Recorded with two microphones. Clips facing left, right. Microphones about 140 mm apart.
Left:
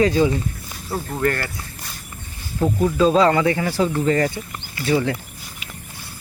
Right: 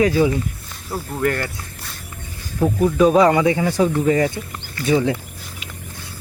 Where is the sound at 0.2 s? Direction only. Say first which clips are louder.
Right 1 dB; 10° right (ahead or behind).